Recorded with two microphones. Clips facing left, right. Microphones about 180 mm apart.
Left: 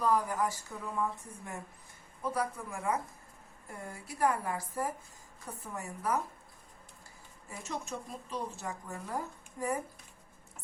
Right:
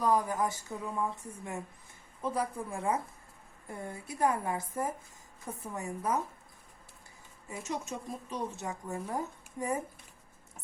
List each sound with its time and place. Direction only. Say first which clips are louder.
0.0 s a woman's voice: right 1 dB; 20° right (ahead or behind)
2.2 s a woman's voice: right 1 dB; 25° right (ahead or behind)
7.4 s a woman's voice: right 3 dB; 20° right (ahead or behind)